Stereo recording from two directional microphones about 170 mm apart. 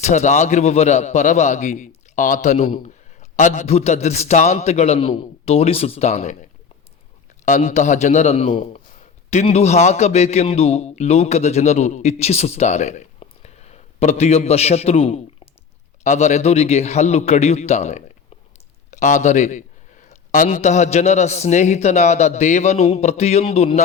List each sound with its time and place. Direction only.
0.0 s a man's voice: 40° left (ahead or behind)